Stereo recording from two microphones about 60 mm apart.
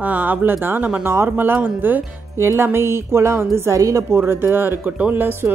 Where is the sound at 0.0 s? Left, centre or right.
Right.